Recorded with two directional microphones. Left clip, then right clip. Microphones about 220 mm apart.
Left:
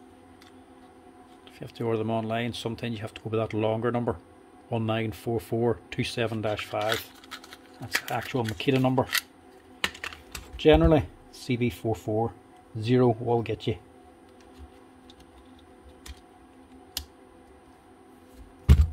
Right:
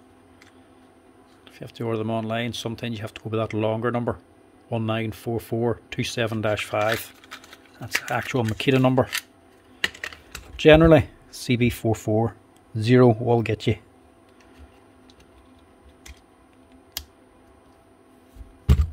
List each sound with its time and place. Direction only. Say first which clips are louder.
1.6 s speech: right 1 dB; 15° right (ahead or behind); by 6.9 s 30° right (ahead or behind)
8.1 s speech: right 4 dB; 30° right (ahead or behind)
10.5 s speech: right 6 dB; 35° right (ahead or behind)